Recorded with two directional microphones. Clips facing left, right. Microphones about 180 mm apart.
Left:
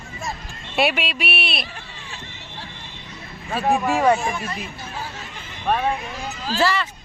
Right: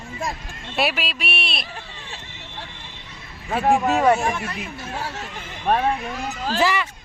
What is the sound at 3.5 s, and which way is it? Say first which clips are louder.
Speech: right 2 dB; 20° right (ahead or behind).